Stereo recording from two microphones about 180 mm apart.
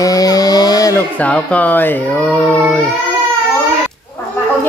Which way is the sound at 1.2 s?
10° left (ahead or behind).